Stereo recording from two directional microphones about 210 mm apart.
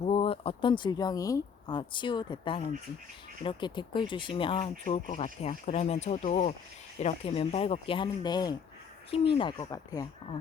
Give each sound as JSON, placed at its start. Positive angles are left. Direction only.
{"t": 0.0, "sound": "speech", "side_deg": 25}